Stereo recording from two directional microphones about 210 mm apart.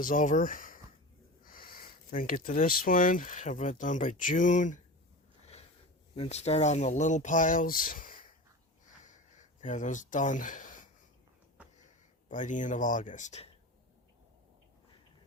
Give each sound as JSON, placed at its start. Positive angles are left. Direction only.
{"t": 0.0, "sound": "speech", "side_deg": 40}
{"t": 6.1, "sound": "speech", "side_deg": 30}
{"t": 9.0, "sound": "a sound", "side_deg": 35}
{"t": 12.3, "sound": "speech", "side_deg": 35}